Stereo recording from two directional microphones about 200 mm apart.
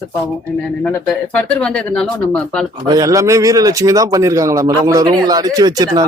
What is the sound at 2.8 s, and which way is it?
Speech, 20° right (ahead or behind).